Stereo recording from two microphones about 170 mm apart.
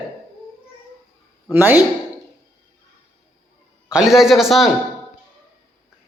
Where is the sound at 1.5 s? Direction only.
10° right (ahead or behind).